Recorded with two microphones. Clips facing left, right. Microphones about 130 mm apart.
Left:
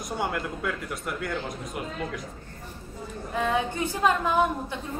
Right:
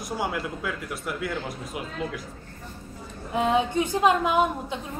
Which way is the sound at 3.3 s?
15° right (ahead or behind).